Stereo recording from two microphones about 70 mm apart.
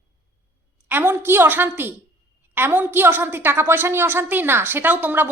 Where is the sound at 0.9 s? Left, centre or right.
Right.